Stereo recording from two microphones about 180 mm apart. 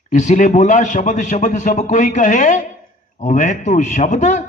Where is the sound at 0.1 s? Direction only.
40° left (ahead or behind).